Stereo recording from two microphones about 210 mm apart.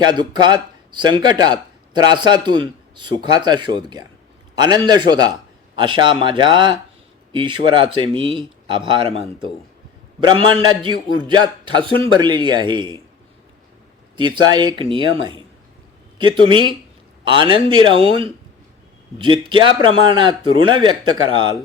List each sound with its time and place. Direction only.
0.0 s a man's voice: 20° right (ahead or behind)
14.2 s a man's voice: 20° right (ahead or behind)